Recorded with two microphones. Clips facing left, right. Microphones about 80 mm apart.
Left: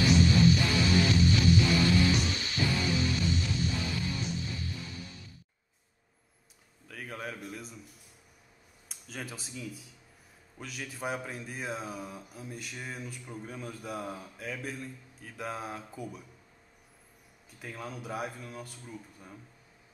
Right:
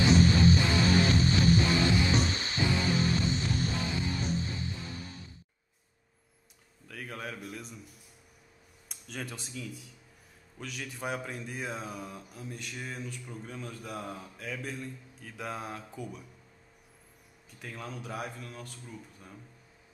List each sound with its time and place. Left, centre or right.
0.0 s music: right
6.9 s a man's voice: centre
8.8 s speech: centre
17.6 s speech: centre